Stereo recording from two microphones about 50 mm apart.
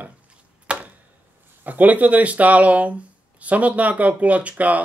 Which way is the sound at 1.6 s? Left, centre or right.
Right.